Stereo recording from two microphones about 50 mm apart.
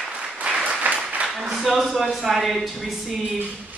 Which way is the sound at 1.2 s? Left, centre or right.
Centre.